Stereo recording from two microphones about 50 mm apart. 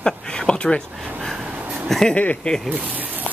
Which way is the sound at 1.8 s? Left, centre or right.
Centre.